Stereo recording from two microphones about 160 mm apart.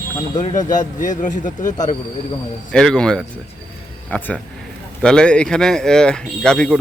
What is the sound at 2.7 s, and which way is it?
A man's voice, 5° left (ahead or behind).